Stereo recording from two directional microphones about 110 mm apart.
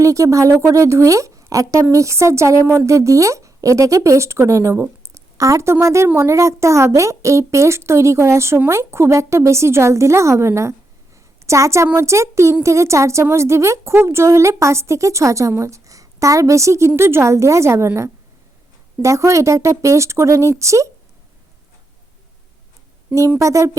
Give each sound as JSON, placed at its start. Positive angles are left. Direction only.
{"t": 0.0, "sound": "a woman's voice", "side_deg": -30}
{"t": 23.4, "sound": "a woman's voice", "side_deg": -30}